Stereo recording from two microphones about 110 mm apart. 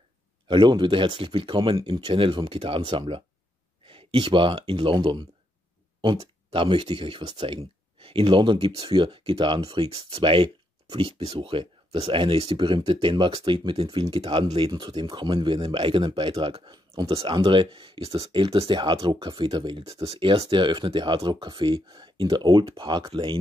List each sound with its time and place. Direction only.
0.5 s speech: 45° right (ahead or behind)
10.9 s speech: 60° right (ahead or behind)
11.2 s speech: 50° right (ahead or behind)
16.7 s speech: 30° right (ahead or behind)
17.1 s speech: 55° right (ahead or behind)
19.9 s speech: 65° right (ahead or behind); by 23.3 s 45° right (ahead or behind)